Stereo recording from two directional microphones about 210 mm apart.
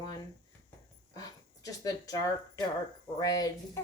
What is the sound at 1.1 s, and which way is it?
Speech, 15° left (ahead or behind).